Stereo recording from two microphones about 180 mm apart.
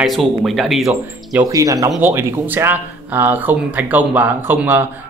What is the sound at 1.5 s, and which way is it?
Speech, 20° right (ahead or behind).